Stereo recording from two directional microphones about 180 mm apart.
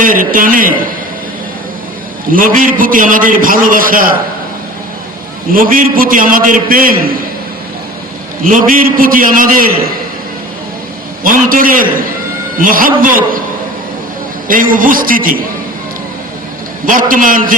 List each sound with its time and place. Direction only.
0.0 s a man's voice: 50° right (ahead or behind)
2.3 s a man's voice: 50° right (ahead or behind)
5.5 s a man's voice: 50° right (ahead or behind)
8.4 s a man's voice: 50° right (ahead or behind)
11.2 s a man's voice: 50° right (ahead or behind)
14.4 s a man's voice: 50° right (ahead or behind)
16.8 s a man's voice: 50° right (ahead or behind)